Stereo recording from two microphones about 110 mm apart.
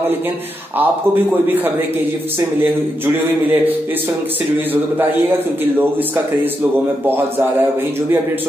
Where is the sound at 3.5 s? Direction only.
15° right (ahead or behind).